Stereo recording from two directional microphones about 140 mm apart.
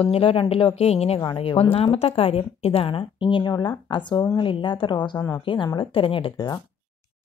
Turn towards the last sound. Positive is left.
turn(degrees=30)  # may be behind; listen again after turning